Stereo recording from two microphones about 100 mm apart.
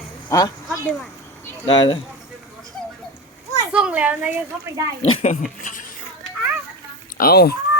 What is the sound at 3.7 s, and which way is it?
Speech, 10° right (ahead or behind).